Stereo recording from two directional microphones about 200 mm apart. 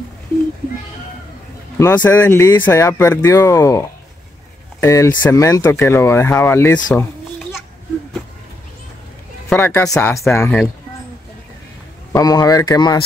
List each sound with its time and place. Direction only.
1.8 s speech: 15° left (ahead or behind)
9.6 s speech: 15° left (ahead or behind)
10.4 s speech: centre (ahead or behind)
12.1 s speech: 15° left (ahead or behind)